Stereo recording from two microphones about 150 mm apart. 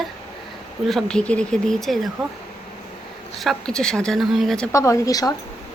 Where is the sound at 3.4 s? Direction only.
5° left (ahead or behind).